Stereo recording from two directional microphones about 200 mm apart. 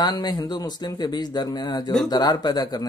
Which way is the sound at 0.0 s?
20° left (ahead or behind).